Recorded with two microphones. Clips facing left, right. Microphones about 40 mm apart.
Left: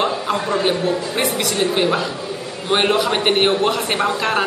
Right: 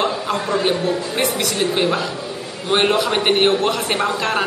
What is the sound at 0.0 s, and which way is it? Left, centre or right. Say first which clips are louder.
A man's voice: left 1 dB; centre.